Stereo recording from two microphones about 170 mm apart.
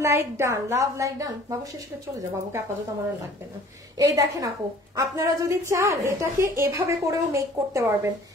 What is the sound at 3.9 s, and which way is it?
A woman's voice, 20° right (ahead or behind).